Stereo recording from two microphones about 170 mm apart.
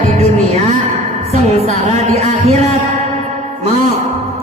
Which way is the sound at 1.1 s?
40° right (ahead or behind).